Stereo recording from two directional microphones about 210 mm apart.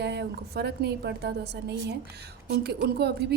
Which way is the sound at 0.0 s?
50° right (ahead or behind).